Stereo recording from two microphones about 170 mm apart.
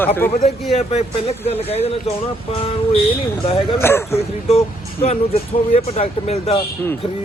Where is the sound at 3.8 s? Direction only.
15° left (ahead or behind).